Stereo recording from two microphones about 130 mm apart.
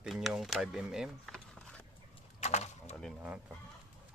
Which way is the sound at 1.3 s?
5° left (ahead or behind).